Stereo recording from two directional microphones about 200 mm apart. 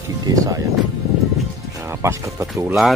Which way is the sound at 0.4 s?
15° right (ahead or behind).